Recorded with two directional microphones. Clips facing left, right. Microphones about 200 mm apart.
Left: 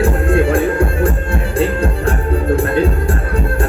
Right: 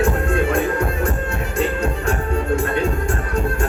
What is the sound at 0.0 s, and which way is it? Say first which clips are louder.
Music: left 4 dB; 30° left (ahead or behind).